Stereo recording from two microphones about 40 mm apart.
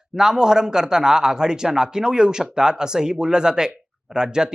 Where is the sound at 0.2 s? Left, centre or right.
Centre.